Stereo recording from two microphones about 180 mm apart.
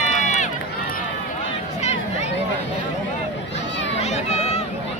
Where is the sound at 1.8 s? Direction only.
40° left (ahead or behind).